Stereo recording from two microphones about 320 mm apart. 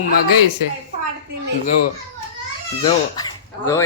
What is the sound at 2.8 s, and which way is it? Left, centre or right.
Speech, centre.